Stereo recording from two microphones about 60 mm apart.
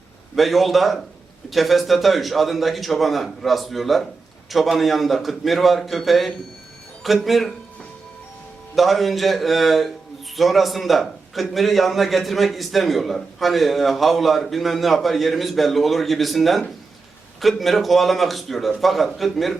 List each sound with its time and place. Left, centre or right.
0.3 s a man's voice: centre
8.7 s a man's voice: centre